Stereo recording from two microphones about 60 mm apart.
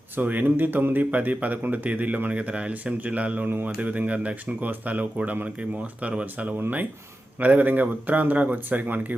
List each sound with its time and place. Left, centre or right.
0.2 s speech: right